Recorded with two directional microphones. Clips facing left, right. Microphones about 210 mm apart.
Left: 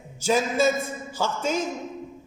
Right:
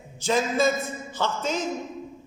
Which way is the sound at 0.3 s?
10° left (ahead or behind).